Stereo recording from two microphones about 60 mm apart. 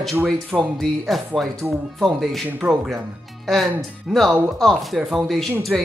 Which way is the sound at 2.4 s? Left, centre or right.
Right.